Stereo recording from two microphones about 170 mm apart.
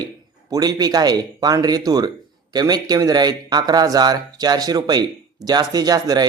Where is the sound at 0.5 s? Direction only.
20° right (ahead or behind).